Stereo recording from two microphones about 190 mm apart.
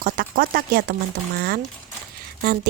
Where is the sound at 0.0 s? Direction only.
50° right (ahead or behind).